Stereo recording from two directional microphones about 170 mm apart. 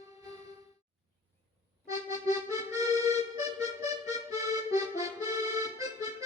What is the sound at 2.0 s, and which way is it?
Accordion, 20° right (ahead or behind).